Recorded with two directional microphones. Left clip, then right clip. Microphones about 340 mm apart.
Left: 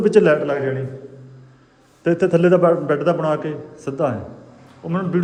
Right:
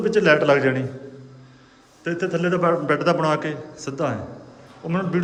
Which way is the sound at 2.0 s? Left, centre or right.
Centre.